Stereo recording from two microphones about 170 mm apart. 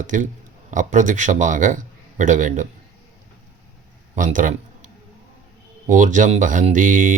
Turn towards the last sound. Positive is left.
turn(degrees=-50)  # may be behind; listen again after turning